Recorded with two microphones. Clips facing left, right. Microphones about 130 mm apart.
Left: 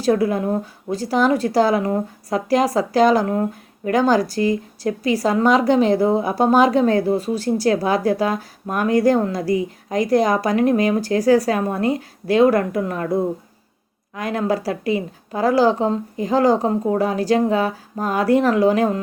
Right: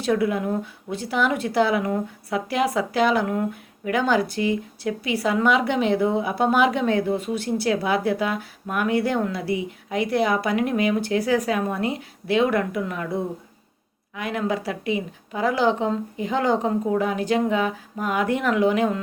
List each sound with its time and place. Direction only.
0.0 s a woman's voice: 35° left (ahead or behind)
14.2 s a woman's voice: 40° left (ahead or behind)